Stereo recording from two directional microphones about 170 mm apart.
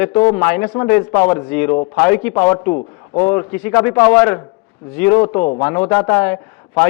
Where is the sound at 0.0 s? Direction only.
10° left (ahead or behind).